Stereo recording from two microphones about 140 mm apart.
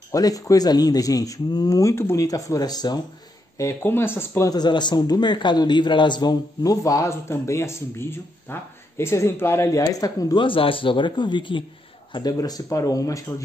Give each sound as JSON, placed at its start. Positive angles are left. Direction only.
{"t": 0.1, "sound": "a man's voice", "side_deg": 25}
{"t": 3.5, "sound": "speech", "side_deg": 20}
{"t": 4.5, "sound": "a man's voice", "side_deg": 30}